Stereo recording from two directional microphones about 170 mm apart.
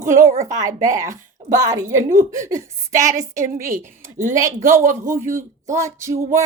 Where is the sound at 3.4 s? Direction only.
55° right (ahead or behind).